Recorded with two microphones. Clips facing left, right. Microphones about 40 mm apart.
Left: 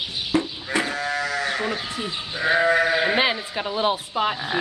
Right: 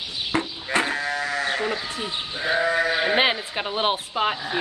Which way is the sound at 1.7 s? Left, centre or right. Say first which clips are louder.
Even; right.